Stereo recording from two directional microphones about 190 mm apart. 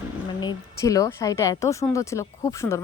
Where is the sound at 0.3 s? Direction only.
20° left (ahead or behind).